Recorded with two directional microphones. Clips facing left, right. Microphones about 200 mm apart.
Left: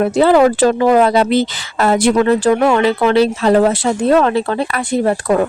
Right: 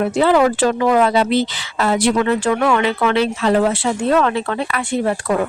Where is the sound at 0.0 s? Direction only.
40° left (ahead or behind).